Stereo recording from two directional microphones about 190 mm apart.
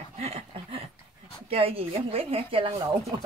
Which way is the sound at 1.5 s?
30° right (ahead or behind).